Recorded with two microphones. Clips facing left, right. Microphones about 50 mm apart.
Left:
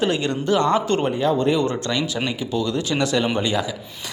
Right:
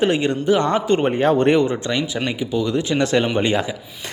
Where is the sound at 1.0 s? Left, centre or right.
Right.